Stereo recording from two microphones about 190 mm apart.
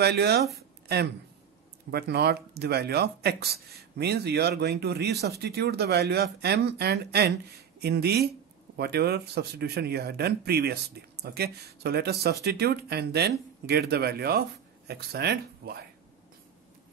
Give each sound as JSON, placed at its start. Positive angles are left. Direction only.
{"t": 0.0, "sound": "speech", "side_deg": -60}
{"t": 1.9, "sound": "speech", "side_deg": -60}